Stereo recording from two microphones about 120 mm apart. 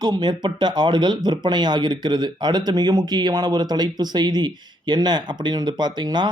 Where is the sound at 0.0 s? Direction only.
35° right (ahead or behind).